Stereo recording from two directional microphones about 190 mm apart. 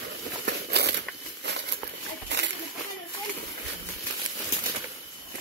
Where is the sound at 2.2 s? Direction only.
65° right (ahead or behind).